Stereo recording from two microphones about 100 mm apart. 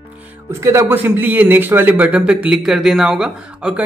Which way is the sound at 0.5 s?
25° right (ahead or behind).